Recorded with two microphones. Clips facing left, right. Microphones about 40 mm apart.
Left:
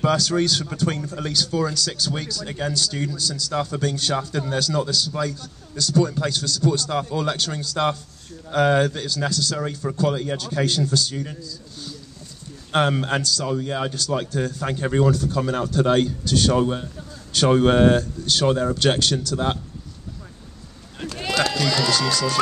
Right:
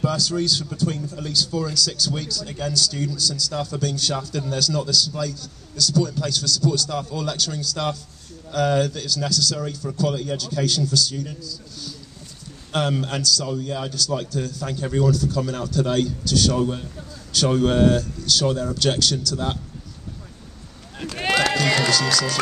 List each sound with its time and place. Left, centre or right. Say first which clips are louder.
0.0 s speech: left 3 dB; left
1.7 s speech: right 1 dB; centre
2.4 s a man's voice: right 1 dB; left
21.2 s run: right 2 dB; right